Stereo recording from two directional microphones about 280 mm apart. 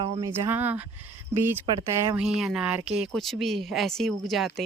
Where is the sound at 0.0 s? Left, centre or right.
Centre.